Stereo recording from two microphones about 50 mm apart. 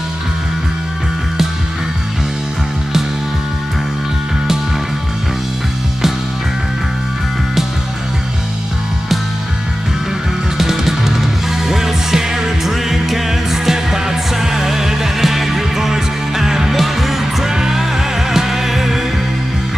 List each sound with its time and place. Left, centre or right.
10.6 s music: centre